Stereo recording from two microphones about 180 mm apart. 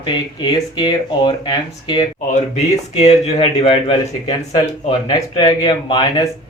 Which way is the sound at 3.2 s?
35° left (ahead or behind).